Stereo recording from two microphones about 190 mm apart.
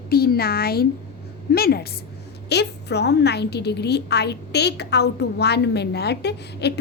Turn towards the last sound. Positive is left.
turn(degrees=60)  # may be behind; listen again after turning